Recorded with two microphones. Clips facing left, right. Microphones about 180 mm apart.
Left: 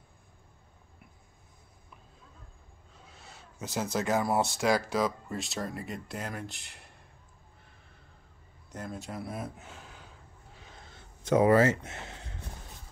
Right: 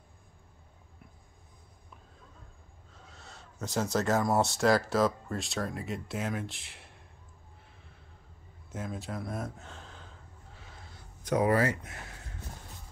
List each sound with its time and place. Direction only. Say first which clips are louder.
3.6 s speech: right 2 dB; centre (ahead or behind)
8.7 s speech: right 1 dB; centre (ahead or behind)
9.6 s gasp: right 1 dB; 10° left (ahead or behind)
11.2 s speech: left 4 dB; 25° left (ahead or behind)